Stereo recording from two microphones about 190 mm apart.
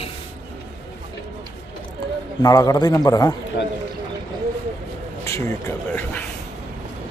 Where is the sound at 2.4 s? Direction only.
20° left (ahead or behind).